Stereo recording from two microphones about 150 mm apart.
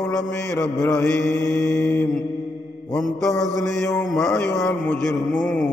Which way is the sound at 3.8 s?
15° left (ahead or behind).